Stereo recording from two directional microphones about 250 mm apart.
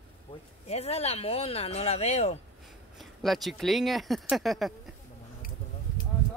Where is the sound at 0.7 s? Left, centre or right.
Left.